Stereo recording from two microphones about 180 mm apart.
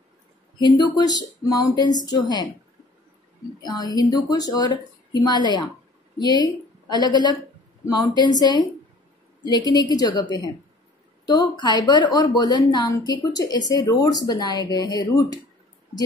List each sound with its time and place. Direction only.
0.6 s a woman's voice: 25° left (ahead or behind)
3.6 s a woman's voice: 25° left (ahead or behind)
9.7 s a woman's voice: 20° left (ahead or behind)
11.6 s a woman's voice: 25° left (ahead or behind)